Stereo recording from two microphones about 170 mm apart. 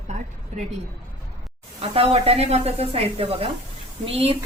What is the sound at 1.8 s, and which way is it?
A woman's voice, 35° right (ahead or behind).